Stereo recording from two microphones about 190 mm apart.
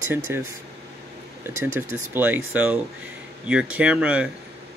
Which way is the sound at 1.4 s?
10° right (ahead or behind).